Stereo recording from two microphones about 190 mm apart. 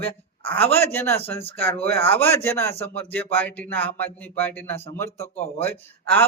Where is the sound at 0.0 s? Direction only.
10° left (ahead or behind).